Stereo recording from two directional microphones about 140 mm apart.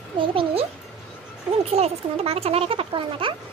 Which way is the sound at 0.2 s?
40° right (ahead or behind).